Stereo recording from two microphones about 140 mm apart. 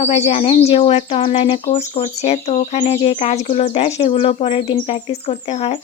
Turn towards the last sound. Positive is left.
turn(degrees=50)  # may be behind; listen again after turning